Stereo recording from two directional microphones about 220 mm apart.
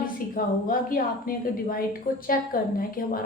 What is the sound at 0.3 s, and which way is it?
A woman's voice, 40° left (ahead or behind).